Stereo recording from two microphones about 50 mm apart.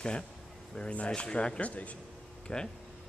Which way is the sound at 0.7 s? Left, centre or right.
Left.